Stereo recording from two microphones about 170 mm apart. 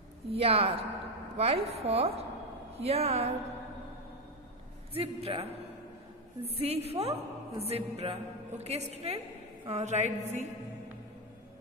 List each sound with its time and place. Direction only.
0.3 s a woman's voice: 35° right (ahead or behind)
4.9 s a woman's voice: 35° right (ahead or behind)
6.6 s a woman's voice: 35° right (ahead or behind)